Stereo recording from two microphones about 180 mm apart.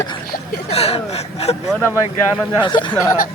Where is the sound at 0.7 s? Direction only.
35° left (ahead or behind).